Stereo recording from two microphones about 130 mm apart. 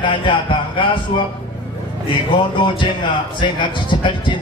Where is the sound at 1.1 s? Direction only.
40° left (ahead or behind).